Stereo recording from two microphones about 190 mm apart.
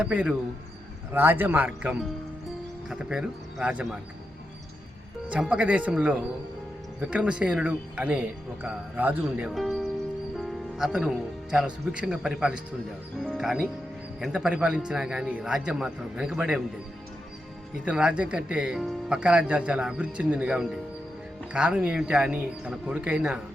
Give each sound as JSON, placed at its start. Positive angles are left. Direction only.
{"t": 0.0, "sound": "a man's voice", "side_deg": -5}
{"t": 5.3, "sound": "a man's voice", "side_deg": -5}
{"t": 10.3, "sound": "music", "side_deg": 0}
{"t": 11.5, "sound": "speech", "side_deg": -5}
{"t": 17.8, "sound": "speech", "side_deg": -5}